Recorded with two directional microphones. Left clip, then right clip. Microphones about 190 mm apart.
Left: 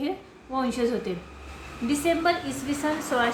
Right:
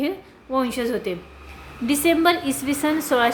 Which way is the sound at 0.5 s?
35° right (ahead or behind).